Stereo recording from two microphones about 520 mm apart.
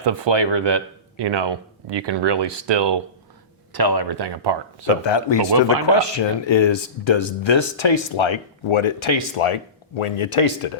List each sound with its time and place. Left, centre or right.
0.0 s speech: right
5.0 s speech: left
5.5 s speech: right
5.9 s speech: left